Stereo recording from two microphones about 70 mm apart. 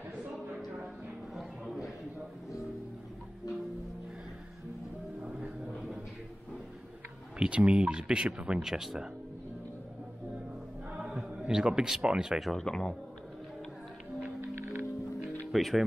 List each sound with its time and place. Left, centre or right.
1.3 s a sound: centre
5.2 s music: centre
7.3 s speech: centre
11.0 s speech: centre
12.5 s a man's voice: centre
14.4 s music: right
15.5 s speech: centre